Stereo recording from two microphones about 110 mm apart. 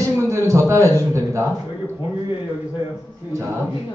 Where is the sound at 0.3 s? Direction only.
25° right (ahead or behind).